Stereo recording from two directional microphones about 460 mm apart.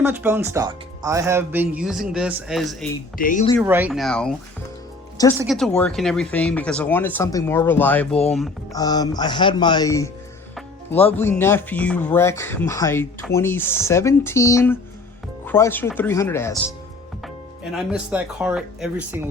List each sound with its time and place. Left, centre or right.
0.0 s speech: centre
3.2 s speech: centre
3.6 s speech: centre
5.4 s speech: centre